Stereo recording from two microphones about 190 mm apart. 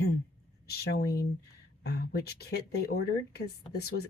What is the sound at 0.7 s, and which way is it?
Speech, 55° left (ahead or behind).